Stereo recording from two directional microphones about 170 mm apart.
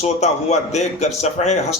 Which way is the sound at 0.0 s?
40° left (ahead or behind).